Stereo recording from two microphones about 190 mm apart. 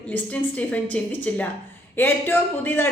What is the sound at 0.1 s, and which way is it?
Speech, 10° left (ahead or behind).